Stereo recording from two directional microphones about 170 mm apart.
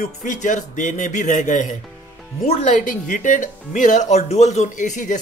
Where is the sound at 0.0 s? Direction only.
45° left (ahead or behind).